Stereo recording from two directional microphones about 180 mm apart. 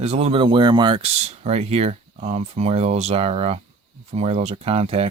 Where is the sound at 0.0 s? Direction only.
35° right (ahead or behind).